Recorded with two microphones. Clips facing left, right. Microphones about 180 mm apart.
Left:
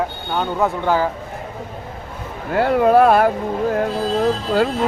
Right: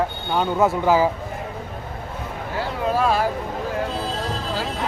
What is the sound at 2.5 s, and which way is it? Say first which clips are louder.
Speech: left 10 dB; 60° left (ahead or behind).